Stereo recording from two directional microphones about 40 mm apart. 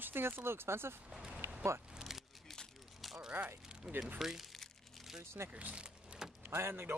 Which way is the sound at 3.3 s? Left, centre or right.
Right.